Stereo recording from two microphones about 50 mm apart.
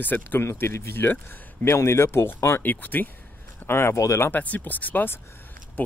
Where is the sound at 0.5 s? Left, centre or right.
Left.